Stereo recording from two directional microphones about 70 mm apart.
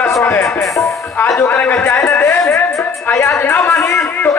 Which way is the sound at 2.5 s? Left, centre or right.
Left.